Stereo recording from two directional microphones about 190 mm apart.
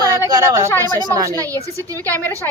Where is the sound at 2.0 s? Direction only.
10° left (ahead or behind).